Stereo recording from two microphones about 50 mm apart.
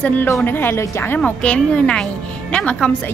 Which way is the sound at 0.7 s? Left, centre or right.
Left.